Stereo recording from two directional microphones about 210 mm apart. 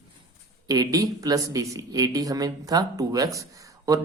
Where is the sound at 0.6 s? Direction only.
15° right (ahead or behind).